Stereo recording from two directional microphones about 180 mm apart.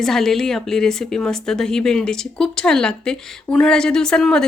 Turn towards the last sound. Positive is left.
turn(degrees=5)  # may be behind; listen again after turning